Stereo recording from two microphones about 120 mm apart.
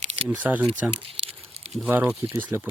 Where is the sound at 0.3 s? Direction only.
10° right (ahead or behind).